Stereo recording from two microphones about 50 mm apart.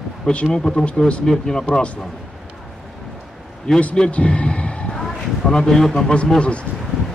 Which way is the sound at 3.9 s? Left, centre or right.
Centre.